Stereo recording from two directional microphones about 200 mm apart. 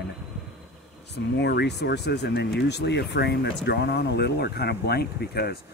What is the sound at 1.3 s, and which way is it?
Speech, 55° left (ahead or behind).